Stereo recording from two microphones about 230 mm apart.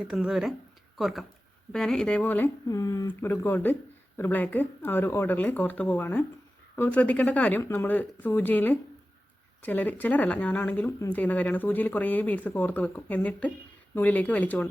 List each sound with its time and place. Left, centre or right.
0.0 s speech: centre